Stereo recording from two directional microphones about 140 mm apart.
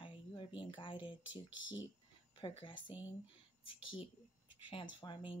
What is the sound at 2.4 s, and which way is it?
Speech, 35° left (ahead or behind).